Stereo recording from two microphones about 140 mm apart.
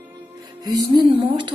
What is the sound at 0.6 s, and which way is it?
Speech, 30° right (ahead or behind).